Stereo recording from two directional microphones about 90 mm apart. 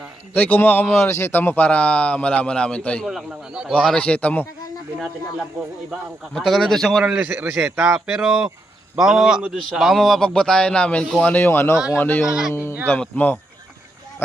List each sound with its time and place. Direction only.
0.3 s a man's voice: 20° left (ahead or behind)
3.1 s a man's voice: 5° right (ahead or behind)
3.8 s speech: 15° left (ahead or behind)
6.3 s speech: centre (ahead or behind)
7.0 s a man's voice: 15° right (ahead or behind)
7.8 s speech: 5° right (ahead or behind); by 11.3 s 15° left (ahead or behind)
11.3 s a man's voice: 25° left (ahead or behind)
12.2 s speech: 5° right (ahead or behind)
13.0 s a man's voice: 20° left (ahead or behind)